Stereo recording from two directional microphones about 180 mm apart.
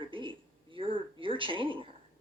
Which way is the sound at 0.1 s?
30° right (ahead or behind).